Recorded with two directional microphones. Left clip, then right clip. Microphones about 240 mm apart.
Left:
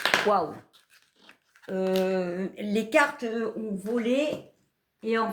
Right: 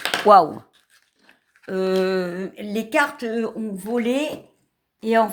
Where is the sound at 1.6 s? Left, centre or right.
Right.